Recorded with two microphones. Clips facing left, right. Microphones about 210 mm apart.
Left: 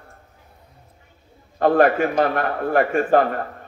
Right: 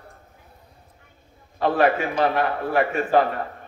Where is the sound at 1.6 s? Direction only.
45° left (ahead or behind).